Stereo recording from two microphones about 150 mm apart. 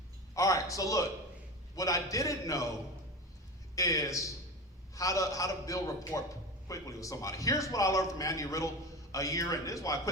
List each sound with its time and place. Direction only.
0.3 s a man's voice: 20° left (ahead or behind)
3.8 s a man's voice: 20° left (ahead or behind)